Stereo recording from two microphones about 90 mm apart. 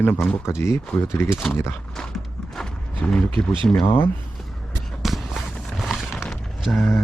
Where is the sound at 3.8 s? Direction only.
25° left (ahead or behind).